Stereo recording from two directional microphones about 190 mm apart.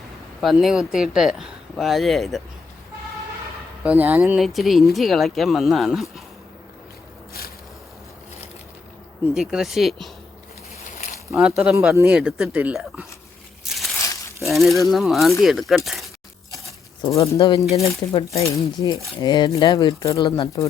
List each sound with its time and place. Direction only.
0.4 s speech: centre (ahead or behind)
3.8 s speech: 10° right (ahead or behind)
9.3 s speech: centre (ahead or behind)
10.9 s a sound: 40° left (ahead or behind)
11.3 s speech: centre (ahead or behind)
14.4 s speech: centre (ahead or behind)
16.6 s speech: 15° left (ahead or behind)
18.3 s speech: 15° left (ahead or behind)